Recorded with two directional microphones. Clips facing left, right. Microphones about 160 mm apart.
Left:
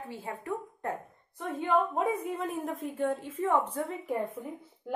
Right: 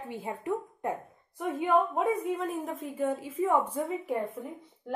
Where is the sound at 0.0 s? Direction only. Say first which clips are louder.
Right 3 dB; 20° right (ahead or behind).